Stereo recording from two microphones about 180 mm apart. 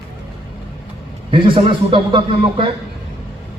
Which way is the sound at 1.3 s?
30° right (ahead or behind).